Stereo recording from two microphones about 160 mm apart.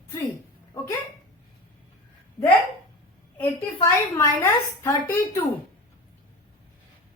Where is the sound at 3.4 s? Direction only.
15° left (ahead or behind).